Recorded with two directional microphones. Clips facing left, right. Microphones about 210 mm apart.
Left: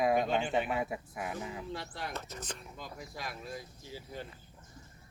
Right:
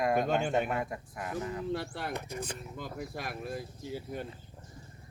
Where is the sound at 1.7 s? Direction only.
55° right (ahead or behind).